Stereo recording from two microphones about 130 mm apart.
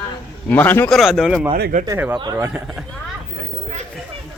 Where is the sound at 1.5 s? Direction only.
75° right (ahead or behind).